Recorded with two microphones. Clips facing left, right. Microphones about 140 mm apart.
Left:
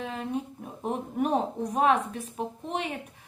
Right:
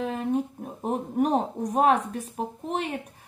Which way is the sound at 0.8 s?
40° right (ahead or behind).